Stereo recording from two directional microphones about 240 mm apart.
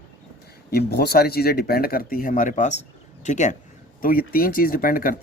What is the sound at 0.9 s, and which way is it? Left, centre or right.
Speech, left.